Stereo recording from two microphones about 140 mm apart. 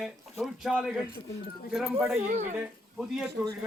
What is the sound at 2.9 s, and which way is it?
Speech, centre (ahead or behind).